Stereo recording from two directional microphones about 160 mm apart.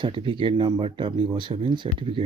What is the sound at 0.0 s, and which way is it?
Speech, 30° right (ahead or behind).